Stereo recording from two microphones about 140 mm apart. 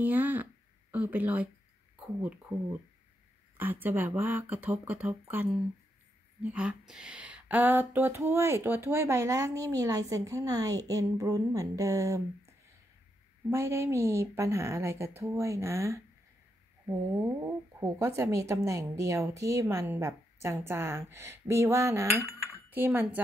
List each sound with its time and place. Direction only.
0.0 s speech: 15° right (ahead or behind)
3.5 s speech: 15° right (ahead or behind)
13.5 s speech: 20° right (ahead or behind)